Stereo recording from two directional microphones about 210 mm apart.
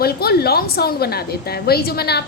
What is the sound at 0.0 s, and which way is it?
A woman's voice, 45° left (ahead or behind).